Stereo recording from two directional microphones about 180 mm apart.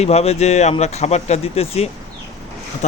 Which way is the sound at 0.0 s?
35° left (ahead or behind).